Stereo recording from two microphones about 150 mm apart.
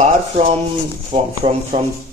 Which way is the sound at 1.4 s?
30° right (ahead or behind).